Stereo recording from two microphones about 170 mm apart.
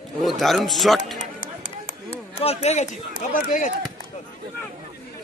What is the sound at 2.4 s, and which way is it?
Speech, 40° left (ahead or behind).